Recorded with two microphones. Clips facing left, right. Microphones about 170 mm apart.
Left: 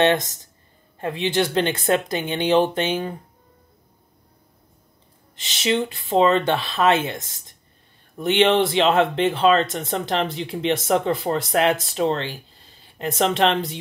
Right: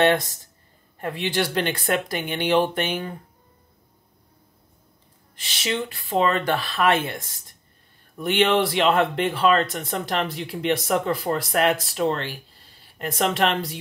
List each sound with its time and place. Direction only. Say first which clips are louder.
0.0 s speech: left 1 dB; 20° left (ahead or behind)
5.3 s speech: left 5 dB; 25° left (ahead or behind)